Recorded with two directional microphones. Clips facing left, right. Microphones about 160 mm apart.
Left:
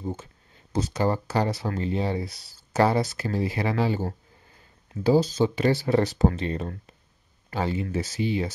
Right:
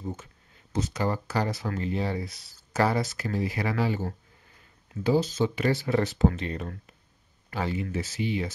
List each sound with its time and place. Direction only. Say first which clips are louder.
0.0 s speech: left 3 dB; 30° left (ahead or behind)